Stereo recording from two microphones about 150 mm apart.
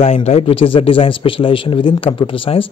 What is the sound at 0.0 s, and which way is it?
Speech, 45° left (ahead or behind).